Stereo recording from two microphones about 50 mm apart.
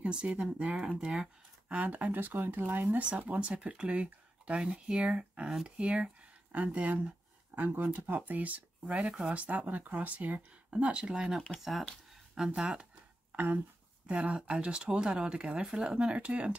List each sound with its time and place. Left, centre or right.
0.0 s speech: right
1.8 s speech: right; by 9.3 s centre
9.3 s speech: right
10.7 s speech: centre
14.0 s speech: right